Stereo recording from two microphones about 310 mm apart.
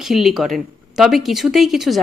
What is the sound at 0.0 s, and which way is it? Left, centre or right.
Speech, centre.